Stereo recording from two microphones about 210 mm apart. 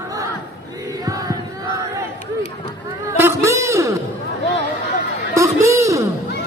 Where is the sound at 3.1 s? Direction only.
10° right (ahead or behind).